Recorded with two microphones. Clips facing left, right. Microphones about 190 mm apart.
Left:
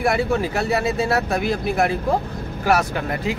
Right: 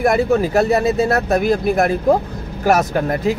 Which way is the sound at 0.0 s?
45° right (ahead or behind).